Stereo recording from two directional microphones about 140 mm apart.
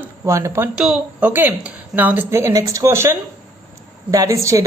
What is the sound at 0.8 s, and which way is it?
A man's voice, 10° right (ahead or behind).